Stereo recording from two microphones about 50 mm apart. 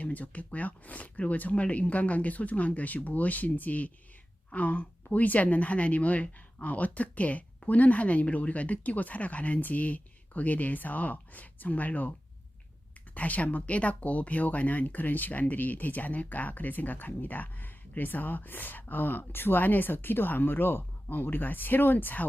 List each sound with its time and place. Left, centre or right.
0.0 s speech: left
13.1 s speech: left